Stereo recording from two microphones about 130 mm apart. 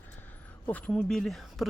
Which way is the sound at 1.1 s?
Centre (ahead or behind).